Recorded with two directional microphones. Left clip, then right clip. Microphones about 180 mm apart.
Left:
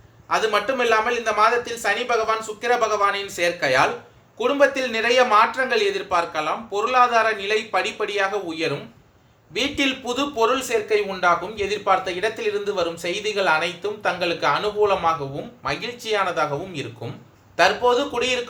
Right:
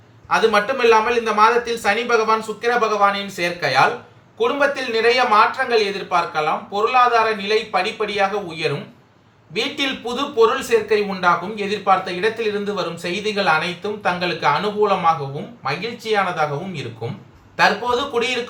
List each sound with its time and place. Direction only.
0.3 s speech: 45° left (ahead or behind)